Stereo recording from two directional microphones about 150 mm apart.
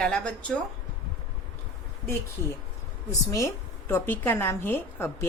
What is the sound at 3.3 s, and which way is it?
A woman's voice, 20° left (ahead or behind).